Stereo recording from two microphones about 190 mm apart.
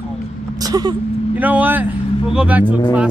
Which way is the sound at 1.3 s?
10° right (ahead or behind).